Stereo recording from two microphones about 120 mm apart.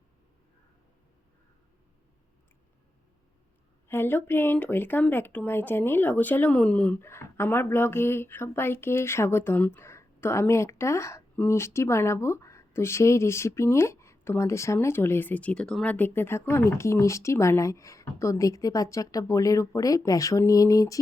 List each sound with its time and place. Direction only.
3.8 s speech: 20° left (ahead or behind)